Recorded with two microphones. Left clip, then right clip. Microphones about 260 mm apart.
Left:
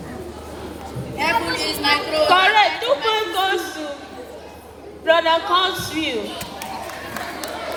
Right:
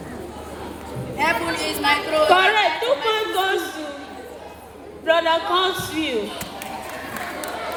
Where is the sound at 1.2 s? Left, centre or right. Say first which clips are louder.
Left 1 dB; centre.